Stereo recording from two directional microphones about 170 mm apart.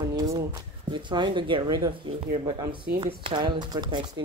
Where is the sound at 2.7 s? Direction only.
65° right (ahead or behind).